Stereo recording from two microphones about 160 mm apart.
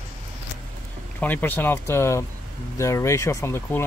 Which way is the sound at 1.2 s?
10° left (ahead or behind).